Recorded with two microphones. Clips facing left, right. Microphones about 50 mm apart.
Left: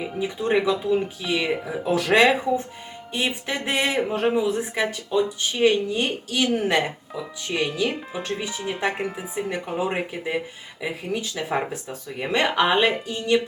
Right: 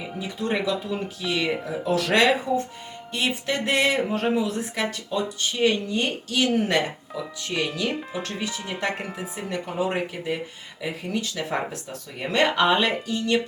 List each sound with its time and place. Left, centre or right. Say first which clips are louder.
0.2 s speech: left 4 dB; centre
12.3 s speech: even; centre